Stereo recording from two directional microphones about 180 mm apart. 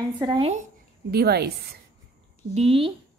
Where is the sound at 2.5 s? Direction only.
35° right (ahead or behind).